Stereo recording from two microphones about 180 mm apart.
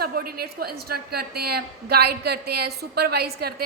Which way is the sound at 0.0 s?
55° right (ahead or behind).